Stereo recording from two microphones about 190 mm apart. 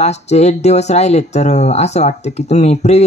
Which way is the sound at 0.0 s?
35° left (ahead or behind).